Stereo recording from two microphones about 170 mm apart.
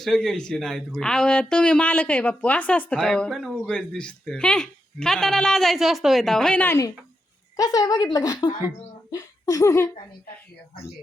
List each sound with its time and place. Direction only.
0.0 s speech: centre (ahead or behind)
7.5 s a woman's voice: 20° left (ahead or behind)